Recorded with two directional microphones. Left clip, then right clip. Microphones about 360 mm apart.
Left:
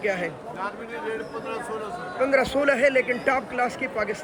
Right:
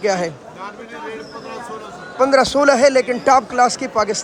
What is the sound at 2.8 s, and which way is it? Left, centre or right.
A man's voice, right.